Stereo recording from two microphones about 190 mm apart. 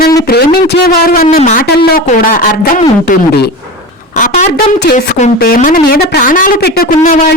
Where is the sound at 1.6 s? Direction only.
55° left (ahead or behind).